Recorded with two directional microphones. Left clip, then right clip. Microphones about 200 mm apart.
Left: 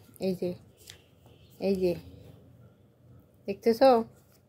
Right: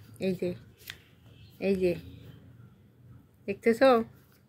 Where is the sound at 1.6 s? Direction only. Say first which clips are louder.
Even; 5° left (ahead or behind).